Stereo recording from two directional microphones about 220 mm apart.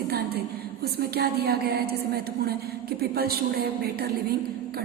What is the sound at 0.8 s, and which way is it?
A woman's voice, 45° right (ahead or behind).